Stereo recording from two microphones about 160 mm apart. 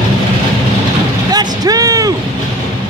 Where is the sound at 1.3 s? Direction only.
25° right (ahead or behind).